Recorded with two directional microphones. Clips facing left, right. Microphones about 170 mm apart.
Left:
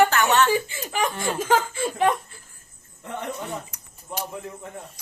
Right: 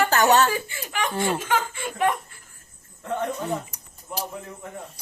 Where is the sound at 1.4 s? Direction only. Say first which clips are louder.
Left 4 dB; 35° left (ahead or behind).